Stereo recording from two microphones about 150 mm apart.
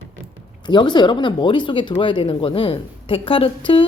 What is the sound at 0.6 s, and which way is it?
A woman's voice, 30° left (ahead or behind).